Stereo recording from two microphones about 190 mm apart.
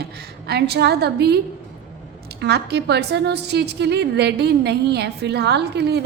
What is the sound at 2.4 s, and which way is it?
A woman's voice, 60° right (ahead or behind).